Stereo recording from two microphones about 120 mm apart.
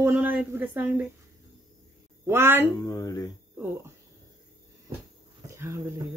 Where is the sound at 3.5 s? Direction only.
15° right (ahead or behind).